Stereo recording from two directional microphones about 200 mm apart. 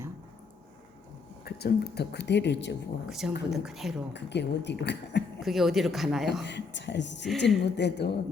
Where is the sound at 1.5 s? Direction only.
55° left (ahead or behind).